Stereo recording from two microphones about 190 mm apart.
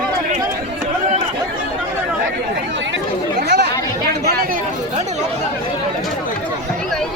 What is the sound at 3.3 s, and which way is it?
Chatter, 60° right (ahead or behind).